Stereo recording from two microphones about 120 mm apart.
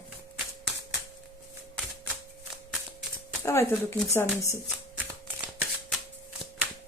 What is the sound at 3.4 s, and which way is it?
Speech, 25° left (ahead or behind).